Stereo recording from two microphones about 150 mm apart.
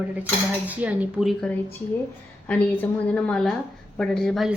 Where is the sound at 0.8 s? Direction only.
10° right (ahead or behind).